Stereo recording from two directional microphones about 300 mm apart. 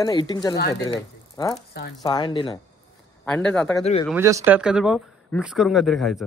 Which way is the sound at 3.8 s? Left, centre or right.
Left.